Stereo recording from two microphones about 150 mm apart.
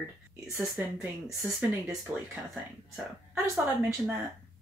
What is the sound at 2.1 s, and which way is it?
Speech, 10° right (ahead or behind).